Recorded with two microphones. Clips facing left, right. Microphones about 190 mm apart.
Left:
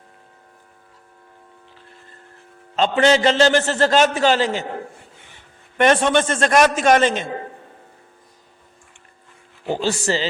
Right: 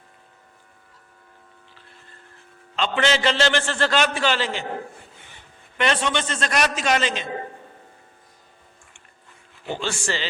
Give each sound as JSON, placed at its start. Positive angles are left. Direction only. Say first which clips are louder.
{"t": 2.7, "sound": "a man's voice", "louder": "left 6 dB", "side_deg": 40}
{"t": 5.7, "sound": "a man's voice", "louder": "left 7 dB", "side_deg": 50}
{"t": 9.6, "sound": "a man's voice", "louder": "left 6 dB", "side_deg": 40}